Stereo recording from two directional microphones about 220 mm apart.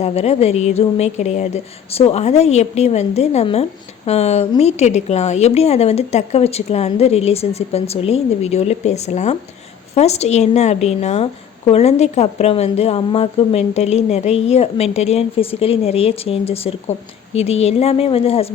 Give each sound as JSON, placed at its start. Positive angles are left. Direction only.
{"t": 0.0, "sound": "speech", "side_deg": 30}